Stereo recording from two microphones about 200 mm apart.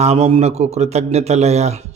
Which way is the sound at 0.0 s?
30° right (ahead or behind).